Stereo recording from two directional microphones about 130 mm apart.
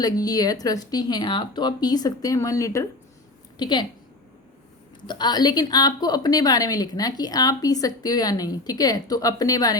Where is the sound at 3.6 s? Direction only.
35° left (ahead or behind).